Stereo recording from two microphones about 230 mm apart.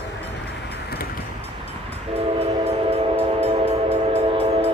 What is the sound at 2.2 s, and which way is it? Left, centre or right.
Train, right.